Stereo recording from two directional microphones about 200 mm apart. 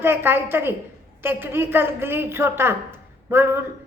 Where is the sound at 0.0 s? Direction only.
10° right (ahead or behind).